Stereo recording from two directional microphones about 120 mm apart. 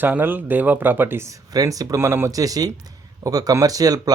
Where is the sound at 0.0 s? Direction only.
15° right (ahead or behind).